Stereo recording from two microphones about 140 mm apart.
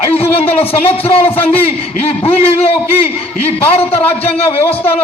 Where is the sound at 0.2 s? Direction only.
45° left (ahead or behind).